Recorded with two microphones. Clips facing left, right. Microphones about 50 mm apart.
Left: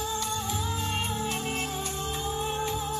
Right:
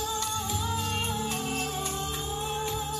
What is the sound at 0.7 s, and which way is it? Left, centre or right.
Music, left.